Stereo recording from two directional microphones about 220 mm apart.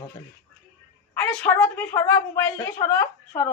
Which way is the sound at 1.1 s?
10° left (ahead or behind).